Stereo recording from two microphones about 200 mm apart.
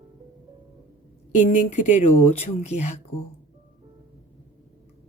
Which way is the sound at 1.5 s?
40° left (ahead or behind).